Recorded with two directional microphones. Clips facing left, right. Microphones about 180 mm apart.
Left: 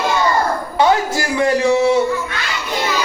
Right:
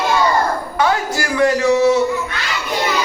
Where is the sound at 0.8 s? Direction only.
20° left (ahead or behind).